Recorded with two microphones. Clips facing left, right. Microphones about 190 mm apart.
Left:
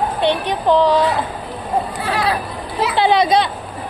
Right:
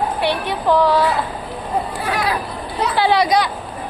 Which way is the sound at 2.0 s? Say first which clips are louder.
Left 1 dB; 30° left (ahead or behind).